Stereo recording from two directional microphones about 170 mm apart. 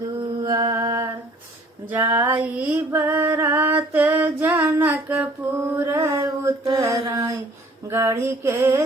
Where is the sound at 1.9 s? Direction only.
10° right (ahead or behind).